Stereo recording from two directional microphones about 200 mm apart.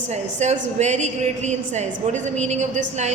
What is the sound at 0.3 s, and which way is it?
A woman's voice, 35° right (ahead or behind).